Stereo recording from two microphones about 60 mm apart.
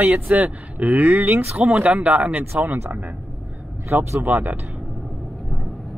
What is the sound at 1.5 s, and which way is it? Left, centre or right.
Speech, right.